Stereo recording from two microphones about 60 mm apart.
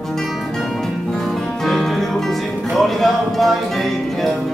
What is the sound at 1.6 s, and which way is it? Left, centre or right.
Music, centre.